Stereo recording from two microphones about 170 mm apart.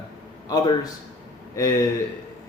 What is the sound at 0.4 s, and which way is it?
Speech, 20° left (ahead or behind).